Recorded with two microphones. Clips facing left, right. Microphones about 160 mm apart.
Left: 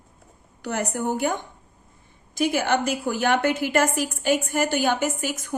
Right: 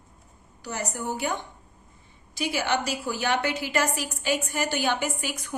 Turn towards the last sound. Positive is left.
turn(degrees=45)  # may be behind; listen again after turning